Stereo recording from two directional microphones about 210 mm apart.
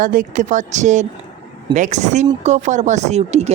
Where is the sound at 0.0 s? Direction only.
40° right (ahead or behind).